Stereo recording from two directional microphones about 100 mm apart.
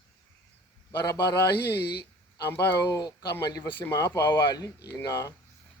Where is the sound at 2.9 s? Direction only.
40° left (ahead or behind).